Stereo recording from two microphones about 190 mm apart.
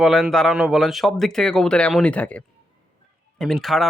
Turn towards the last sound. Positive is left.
turn(degrees=0)  # may be behind; listen again after turning